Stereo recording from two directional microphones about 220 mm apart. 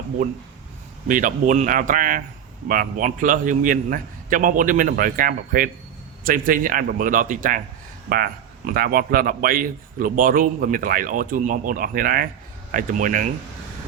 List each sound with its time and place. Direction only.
1.0 s a man's voice: 35° right (ahead or behind)